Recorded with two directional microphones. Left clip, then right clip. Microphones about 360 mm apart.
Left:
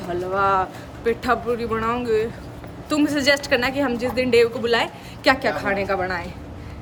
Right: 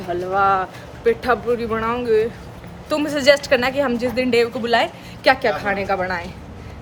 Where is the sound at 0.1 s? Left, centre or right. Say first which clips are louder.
Right 3 dB; centre.